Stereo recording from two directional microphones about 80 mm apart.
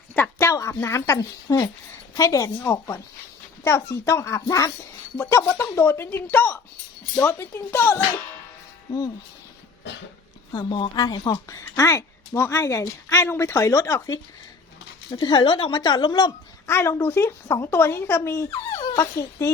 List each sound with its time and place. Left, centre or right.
0.1 s a sound: left
0.7 s speech: left
0.9 s a woman's voice: left
8.9 s a woman's voice: left
10.5 s a woman's voice: left
11.3 s a woman's voice: left
15.1 s speech: left
16.6 s a woman's voice: left